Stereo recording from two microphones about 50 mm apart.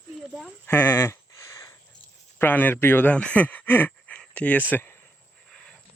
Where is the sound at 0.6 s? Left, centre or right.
Left.